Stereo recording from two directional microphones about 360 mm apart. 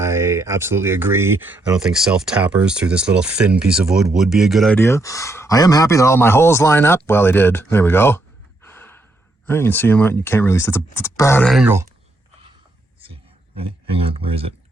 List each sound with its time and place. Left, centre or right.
0.0 s speech: centre
8.6 s gasp: centre
9.5 s speech: centre
13.6 s speech: centre